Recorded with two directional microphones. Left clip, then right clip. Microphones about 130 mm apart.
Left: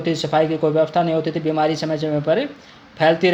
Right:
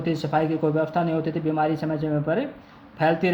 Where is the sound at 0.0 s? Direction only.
25° left (ahead or behind).